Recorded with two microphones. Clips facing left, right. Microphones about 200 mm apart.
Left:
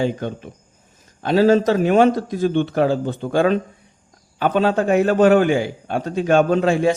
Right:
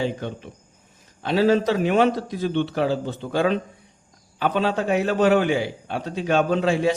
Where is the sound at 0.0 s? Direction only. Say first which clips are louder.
Left 4 dB; 45° left (ahead or behind).